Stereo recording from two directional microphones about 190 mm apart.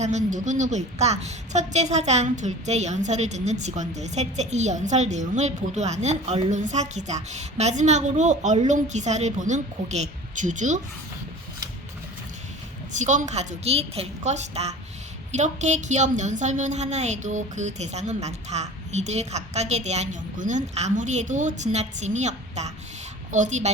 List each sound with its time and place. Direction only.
0.0 s a woman's voice: 40° right (ahead or behind)
12.9 s a woman's voice: 40° right (ahead or behind)